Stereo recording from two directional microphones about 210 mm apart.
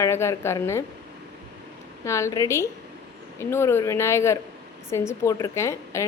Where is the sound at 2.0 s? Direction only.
15° left (ahead or behind).